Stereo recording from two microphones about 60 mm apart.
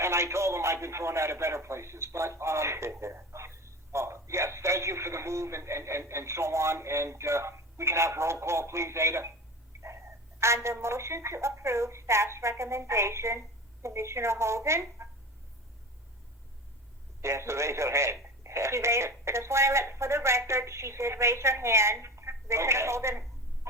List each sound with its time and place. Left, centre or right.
0.0 s a man's voice: right
9.7 s a sound: right
10.4 s a man's voice: right
17.2 s a man's voice: right